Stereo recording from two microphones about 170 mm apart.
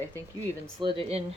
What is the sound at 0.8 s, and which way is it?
Speech, 30° right (ahead or behind).